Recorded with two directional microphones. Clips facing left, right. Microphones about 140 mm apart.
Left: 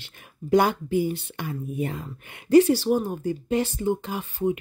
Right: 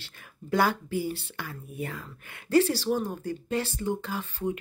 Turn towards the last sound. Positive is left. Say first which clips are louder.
# left 5 dB
turn(degrees=15)  # may be behind; listen again after turning